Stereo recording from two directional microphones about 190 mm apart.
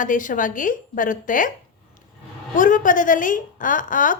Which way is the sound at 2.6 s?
45° left (ahead or behind).